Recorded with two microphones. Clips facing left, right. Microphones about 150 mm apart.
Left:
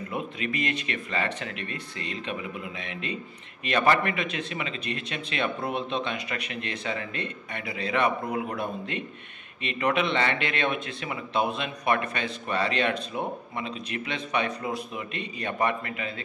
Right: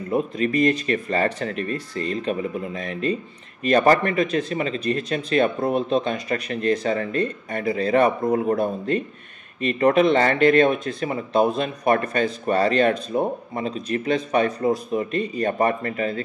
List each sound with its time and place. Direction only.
0.1 s speech: 40° right (ahead or behind)